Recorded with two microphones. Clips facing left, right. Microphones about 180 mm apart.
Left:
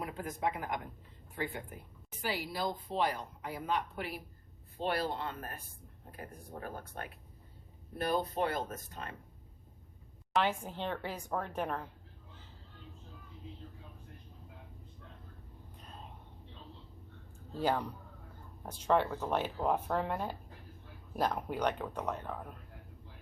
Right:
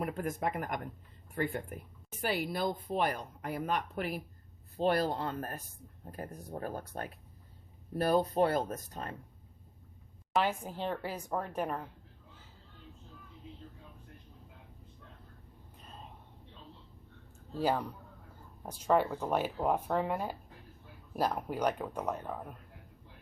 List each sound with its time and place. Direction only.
0.0 s speech: 55° right (ahead or behind)
2.2 s speech: 55° right (ahead or behind); by 9.1 s 40° right (ahead or behind)
10.3 s speech: 5° right (ahead or behind)
17.6 s a man's voice: 5° right (ahead or behind)